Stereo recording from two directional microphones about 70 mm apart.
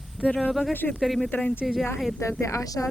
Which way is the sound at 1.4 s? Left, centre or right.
Left.